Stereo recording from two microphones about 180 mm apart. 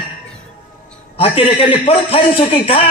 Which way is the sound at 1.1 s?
30° left (ahead or behind).